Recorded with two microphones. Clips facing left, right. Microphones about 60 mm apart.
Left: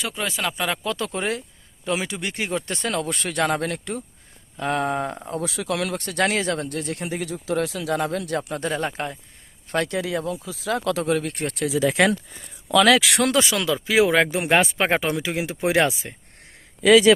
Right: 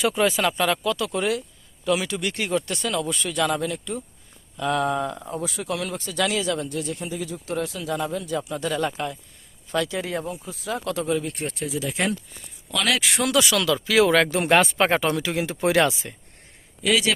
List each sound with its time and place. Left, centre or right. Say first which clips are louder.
0.0 s speech: right 6 dB; centre
0.5 s speech: right 3 dB; centre
0.9 s speech: right 2 dB; left
2.9 s speech: even; left
4.5 s speech: even; left
5.3 s speech: left 2 dB; left
6.9 s speech: left 2 dB; left
9.6 s speech: left 1 dB; left
10.4 s speech: left 4 dB; left
13.2 s speech: left 1 dB; left
13.5 s speech: right 1 dB; left